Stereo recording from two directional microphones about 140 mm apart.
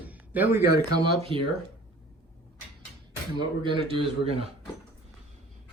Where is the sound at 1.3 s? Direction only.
40° right (ahead or behind).